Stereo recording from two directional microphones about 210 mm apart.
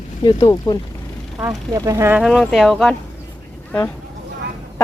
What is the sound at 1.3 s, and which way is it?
Speech, 15° right (ahead or behind).